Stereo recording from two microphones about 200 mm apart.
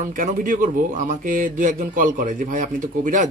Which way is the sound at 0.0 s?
40° right (ahead or behind).